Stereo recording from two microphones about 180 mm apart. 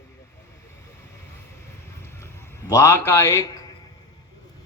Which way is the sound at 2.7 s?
15° left (ahead or behind).